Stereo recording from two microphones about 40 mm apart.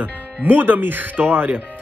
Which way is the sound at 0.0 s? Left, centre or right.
Right.